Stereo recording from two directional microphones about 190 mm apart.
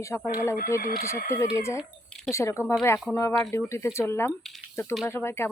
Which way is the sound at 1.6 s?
15° left (ahead or behind).